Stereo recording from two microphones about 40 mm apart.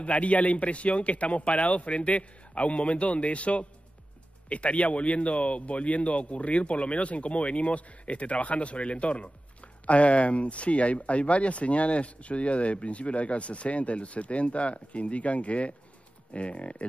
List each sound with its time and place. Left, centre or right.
0.0 s speech: left